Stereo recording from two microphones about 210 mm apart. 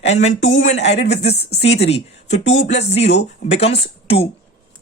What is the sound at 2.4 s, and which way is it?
Speech, 60° left (ahead or behind).